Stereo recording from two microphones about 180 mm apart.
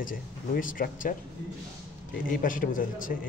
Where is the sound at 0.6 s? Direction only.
50° left (ahead or behind).